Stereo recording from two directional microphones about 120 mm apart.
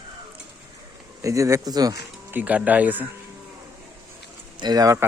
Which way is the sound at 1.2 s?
25° right (ahead or behind).